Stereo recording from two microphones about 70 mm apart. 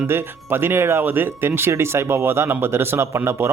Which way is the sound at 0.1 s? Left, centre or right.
Right.